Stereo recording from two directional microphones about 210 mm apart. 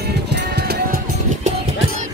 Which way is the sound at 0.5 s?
50° right (ahead or behind).